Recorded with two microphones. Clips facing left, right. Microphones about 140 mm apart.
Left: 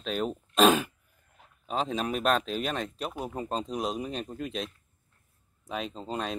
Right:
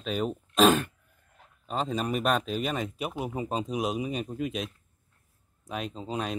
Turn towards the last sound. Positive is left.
turn(degrees=0)  # may be behind; listen again after turning